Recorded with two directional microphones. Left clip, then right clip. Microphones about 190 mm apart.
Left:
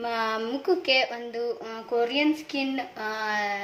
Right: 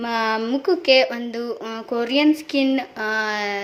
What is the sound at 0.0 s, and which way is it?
A woman's voice, 40° right (ahead or behind).